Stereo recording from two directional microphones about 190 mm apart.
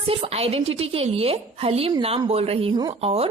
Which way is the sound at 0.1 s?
30° right (ahead or behind).